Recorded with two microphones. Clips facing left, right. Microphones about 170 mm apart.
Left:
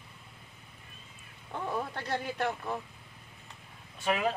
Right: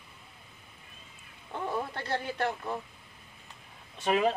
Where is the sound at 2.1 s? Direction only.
10° left (ahead or behind).